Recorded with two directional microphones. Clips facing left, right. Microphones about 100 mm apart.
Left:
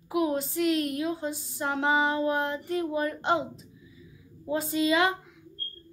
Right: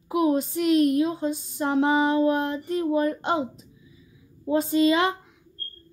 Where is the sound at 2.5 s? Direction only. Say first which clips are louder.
Right 5 dB; 25° right (ahead or behind).